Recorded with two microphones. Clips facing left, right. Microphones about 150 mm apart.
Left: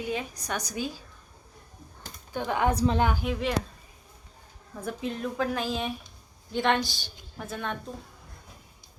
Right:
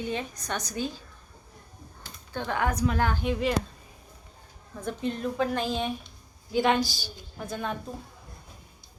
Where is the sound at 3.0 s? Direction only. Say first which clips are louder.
Left 1 dB; 15° left (ahead or behind).